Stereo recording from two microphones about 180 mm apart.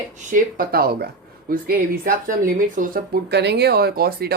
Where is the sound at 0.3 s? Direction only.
55° right (ahead or behind).